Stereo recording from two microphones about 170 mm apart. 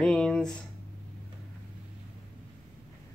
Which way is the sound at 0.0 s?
5° left (ahead or behind).